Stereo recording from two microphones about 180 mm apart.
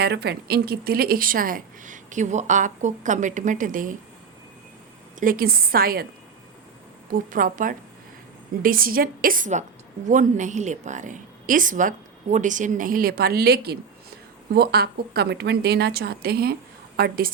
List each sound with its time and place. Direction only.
0.0 s a woman's voice: 65° right (ahead or behind); by 3.9 s 50° right (ahead or behind)
5.2 s a woman's voice: 55° right (ahead or behind)
7.1 s a woman's voice: 50° right (ahead or behind)